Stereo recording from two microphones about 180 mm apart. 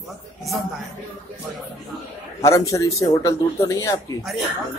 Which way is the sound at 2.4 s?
15° left (ahead or behind).